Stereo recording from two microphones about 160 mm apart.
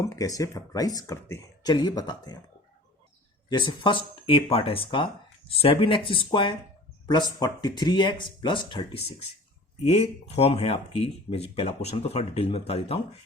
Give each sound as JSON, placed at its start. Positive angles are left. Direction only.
{"t": 0.0, "sound": "speech", "side_deg": 20}
{"t": 3.5, "sound": "speech", "side_deg": 30}